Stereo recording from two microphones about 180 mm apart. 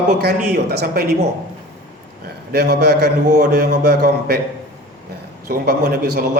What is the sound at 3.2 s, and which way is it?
A man's voice, 45° right (ahead or behind).